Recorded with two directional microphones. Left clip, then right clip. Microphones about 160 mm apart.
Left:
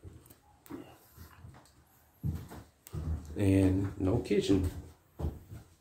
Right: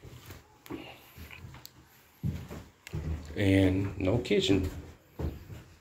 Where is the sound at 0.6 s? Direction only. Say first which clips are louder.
Right 4 dB; 30° left (ahead or behind).